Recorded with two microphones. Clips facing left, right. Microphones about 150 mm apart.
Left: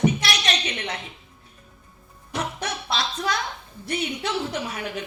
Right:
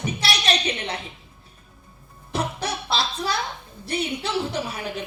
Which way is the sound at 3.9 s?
30° right (ahead or behind).